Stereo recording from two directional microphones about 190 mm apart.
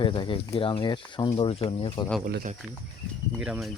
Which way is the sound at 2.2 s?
50° right (ahead or behind).